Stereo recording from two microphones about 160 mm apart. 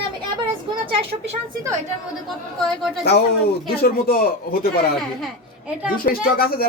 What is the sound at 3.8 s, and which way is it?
Speech, 70° left (ahead or behind).